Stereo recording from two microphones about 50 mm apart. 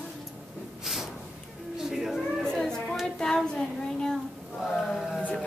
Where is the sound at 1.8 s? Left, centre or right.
Centre.